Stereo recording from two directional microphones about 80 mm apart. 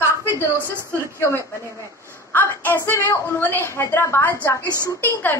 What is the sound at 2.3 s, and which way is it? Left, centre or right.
A woman's voice, left.